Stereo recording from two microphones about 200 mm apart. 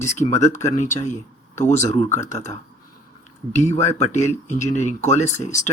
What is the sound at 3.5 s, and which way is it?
Speech, 35° left (ahead or behind).